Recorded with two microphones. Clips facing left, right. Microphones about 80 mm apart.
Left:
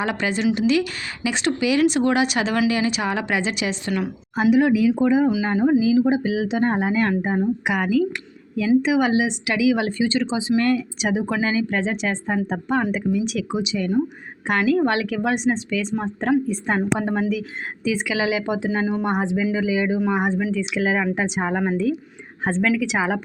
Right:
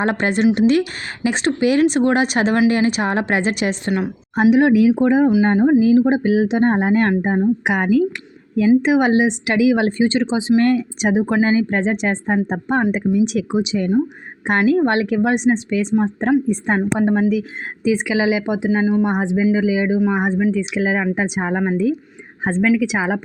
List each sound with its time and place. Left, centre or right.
0.0 s speech: right
4.4 s speech: right
5.4 s speech: right
10.8 s speech: right
11.3 s speech: right
12.8 s a woman's voice: right
17.8 s a woman's voice: right